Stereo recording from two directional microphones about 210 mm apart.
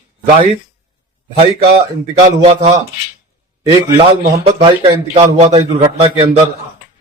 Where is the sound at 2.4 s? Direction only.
30° right (ahead or behind).